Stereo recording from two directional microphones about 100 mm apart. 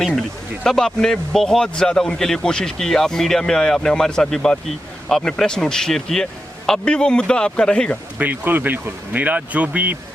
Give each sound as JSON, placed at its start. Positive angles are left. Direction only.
{"t": 0.0, "sound": "speech", "side_deg": 5}
{"t": 8.2, "sound": "speech", "side_deg": -20}